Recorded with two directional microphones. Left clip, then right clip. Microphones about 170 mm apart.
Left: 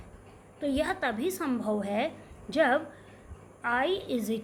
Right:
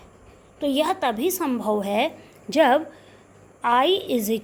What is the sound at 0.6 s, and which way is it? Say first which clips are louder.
A woman's voice: right 7 dB; 35° right (ahead or behind).